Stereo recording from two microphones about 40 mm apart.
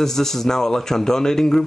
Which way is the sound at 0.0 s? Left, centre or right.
Centre.